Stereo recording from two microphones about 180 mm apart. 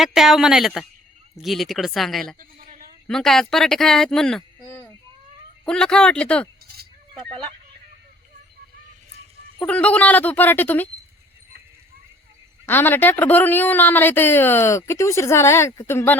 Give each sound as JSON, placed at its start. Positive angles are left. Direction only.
{"t": 0.0, "sound": "speech", "side_deg": 0}
{"t": 2.4, "sound": "a sound", "side_deg": -50}
{"t": 3.1, "sound": "speech", "side_deg": 0}
{"t": 9.6, "sound": "speech", "side_deg": 5}
{"t": 12.6, "sound": "speech", "side_deg": 10}